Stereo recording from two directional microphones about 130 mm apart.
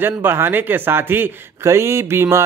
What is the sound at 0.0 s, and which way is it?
Speech, 15° right (ahead or behind).